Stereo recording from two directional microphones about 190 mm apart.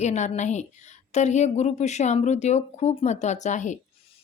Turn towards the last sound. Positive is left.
turn(degrees=40)  # may be behind; listen again after turning